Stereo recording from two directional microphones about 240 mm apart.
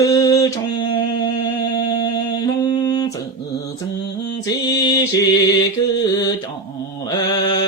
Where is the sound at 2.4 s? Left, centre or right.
Centre.